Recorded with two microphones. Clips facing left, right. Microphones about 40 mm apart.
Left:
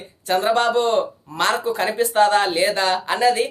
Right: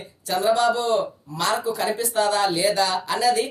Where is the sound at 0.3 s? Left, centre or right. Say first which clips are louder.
Left 1 dB; left.